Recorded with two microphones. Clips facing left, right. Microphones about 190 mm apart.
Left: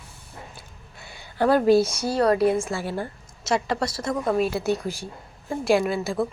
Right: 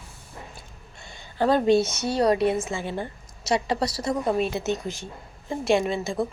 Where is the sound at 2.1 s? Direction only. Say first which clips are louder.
Left 1 dB; 30° right (ahead or behind).